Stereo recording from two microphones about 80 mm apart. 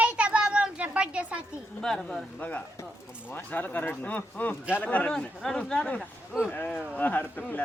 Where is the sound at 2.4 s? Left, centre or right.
Left.